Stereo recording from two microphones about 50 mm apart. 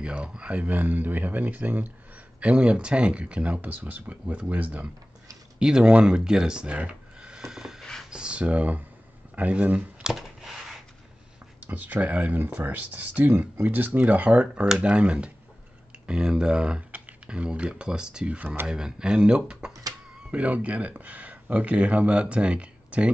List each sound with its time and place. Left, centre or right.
0.0 s speech: right
5.6 s speech: centre
6.8 s a sound: centre
8.1 s speech: right
10.0 s a sound: centre
11.6 s speech: right